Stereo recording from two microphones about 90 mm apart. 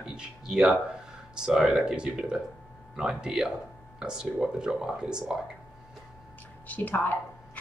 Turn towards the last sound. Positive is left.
turn(degrees=20)  # may be behind; listen again after turning